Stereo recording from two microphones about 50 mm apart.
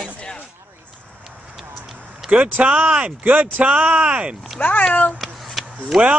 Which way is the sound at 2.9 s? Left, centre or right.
Right.